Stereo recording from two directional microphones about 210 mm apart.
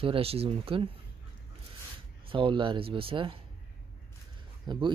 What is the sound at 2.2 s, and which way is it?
Speech, 25° right (ahead or behind).